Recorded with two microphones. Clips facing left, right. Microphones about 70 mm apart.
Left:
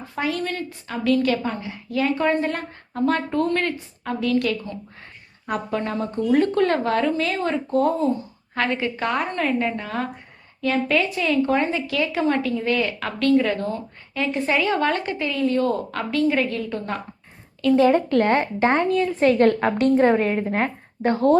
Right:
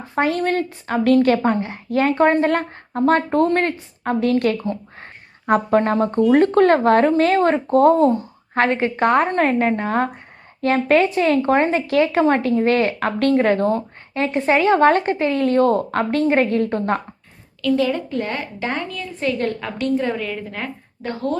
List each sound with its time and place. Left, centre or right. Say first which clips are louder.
0.2 s a woman's voice: right 7 dB; right
15.4 s a woman's voice: right 4 dB; right
17.6 s a woman's voice: left 3 dB; left